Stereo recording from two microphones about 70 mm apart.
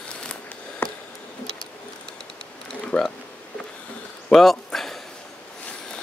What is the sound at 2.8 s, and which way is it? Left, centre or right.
Speech, centre.